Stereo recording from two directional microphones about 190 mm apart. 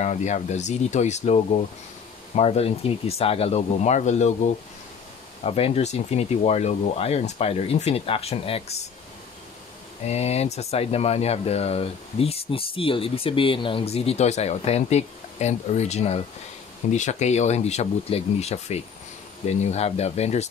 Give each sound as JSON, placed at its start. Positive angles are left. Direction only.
{"t": 0.0, "sound": "speech", "side_deg": 40}
{"t": 10.0, "sound": "speech", "side_deg": 35}